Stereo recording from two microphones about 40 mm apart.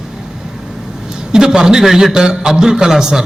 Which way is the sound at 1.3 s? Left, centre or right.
Centre.